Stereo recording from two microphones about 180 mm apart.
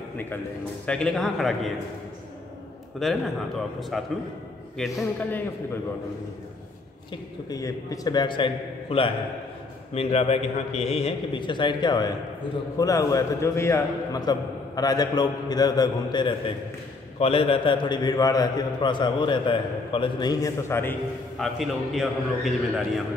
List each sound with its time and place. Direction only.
0.8 s a man's voice: 5° left (ahead or behind)
3.0 s a man's voice: centre (ahead or behind)
7.4 s a man's voice: 20° left (ahead or behind)
21.4 s a man's voice: centre (ahead or behind)